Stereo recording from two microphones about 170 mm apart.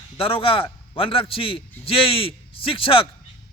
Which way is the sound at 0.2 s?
30° left (ahead or behind).